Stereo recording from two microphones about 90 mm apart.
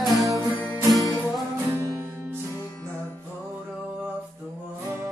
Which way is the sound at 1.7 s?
25° right (ahead or behind).